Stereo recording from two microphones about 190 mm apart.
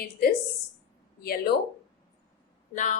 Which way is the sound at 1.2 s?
55° left (ahead or behind).